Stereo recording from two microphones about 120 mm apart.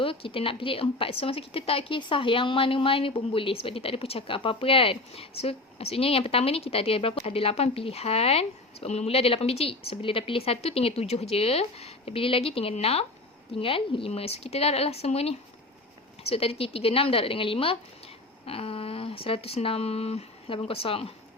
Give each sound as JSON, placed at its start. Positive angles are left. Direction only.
{"t": 0.0, "sound": "a woman's voice", "side_deg": 50}